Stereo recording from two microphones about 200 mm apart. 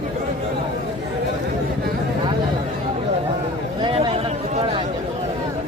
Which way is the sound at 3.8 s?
25° right (ahead or behind).